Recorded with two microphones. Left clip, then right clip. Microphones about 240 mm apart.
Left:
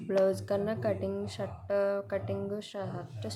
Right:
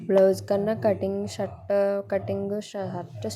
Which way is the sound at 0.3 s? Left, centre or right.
Centre.